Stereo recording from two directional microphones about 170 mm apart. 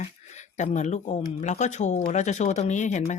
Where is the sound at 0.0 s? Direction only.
45° left (ahead or behind).